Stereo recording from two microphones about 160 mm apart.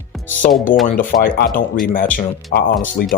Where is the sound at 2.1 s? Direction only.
70° left (ahead or behind).